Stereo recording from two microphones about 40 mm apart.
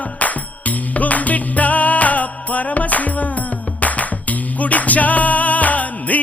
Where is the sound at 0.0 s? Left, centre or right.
Left.